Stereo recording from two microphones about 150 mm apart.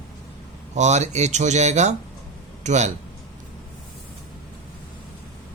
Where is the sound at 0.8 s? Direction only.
50° right (ahead or behind).